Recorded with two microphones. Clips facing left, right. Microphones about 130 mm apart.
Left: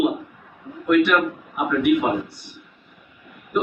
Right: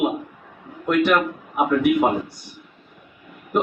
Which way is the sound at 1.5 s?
40° right (ahead or behind).